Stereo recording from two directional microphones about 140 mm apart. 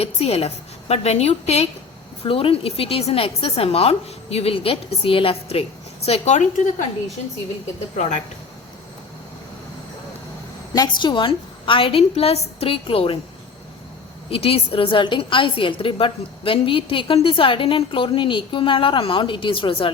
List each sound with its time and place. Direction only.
0.0 s a woman's voice: 45° left (ahead or behind); by 6.8 s 60° left (ahead or behind)
10.8 s a woman's voice: 35° left (ahead or behind)
14.3 s a woman's voice: 45° left (ahead or behind)